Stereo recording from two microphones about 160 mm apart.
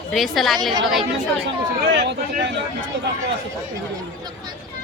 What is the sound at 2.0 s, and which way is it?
Speech, 90° right.